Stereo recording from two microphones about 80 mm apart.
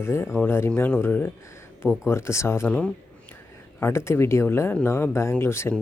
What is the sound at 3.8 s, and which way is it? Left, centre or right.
Speech, left.